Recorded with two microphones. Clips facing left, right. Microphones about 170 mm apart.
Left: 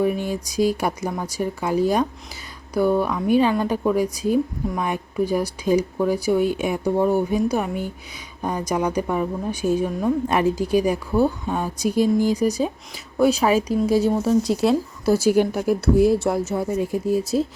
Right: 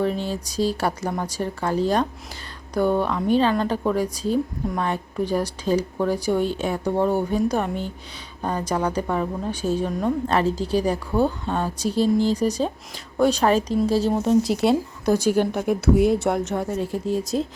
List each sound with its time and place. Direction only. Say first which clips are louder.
0.0 s a woman's voice: left 2 dB; 15° left (ahead or behind)
14.1 s speech: even; centre (ahead or behind)